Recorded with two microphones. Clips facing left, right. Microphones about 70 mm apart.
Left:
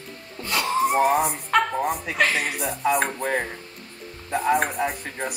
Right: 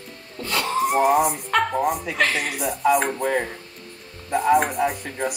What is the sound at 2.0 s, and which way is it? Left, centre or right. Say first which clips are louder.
Speech: even; centre.